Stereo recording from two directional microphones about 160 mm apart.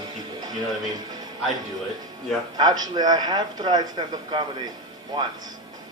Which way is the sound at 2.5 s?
25° right (ahead or behind).